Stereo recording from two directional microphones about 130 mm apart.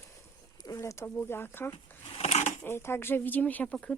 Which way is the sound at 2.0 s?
50° left (ahead or behind).